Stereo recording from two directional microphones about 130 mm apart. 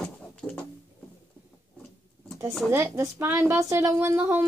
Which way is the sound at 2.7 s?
20° right (ahead or behind).